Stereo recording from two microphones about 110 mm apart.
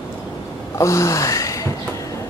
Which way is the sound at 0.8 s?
30° left (ahead or behind).